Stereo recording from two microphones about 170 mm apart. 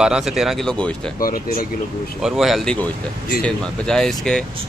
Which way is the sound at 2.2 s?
Centre (ahead or behind).